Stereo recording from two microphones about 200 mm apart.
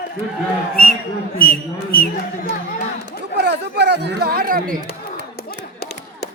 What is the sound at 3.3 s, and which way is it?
Chatter, 55° right (ahead or behind).